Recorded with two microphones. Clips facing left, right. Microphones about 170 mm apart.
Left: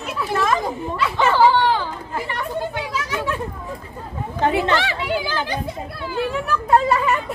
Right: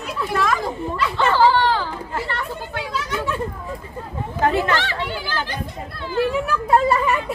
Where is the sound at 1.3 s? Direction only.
15° left (ahead or behind).